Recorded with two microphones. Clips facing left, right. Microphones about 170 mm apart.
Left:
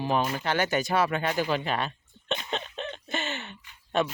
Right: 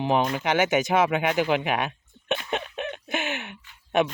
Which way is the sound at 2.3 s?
15° right (ahead or behind).